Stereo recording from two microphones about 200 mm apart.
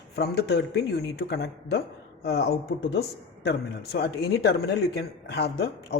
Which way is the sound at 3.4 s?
55° left (ahead or behind).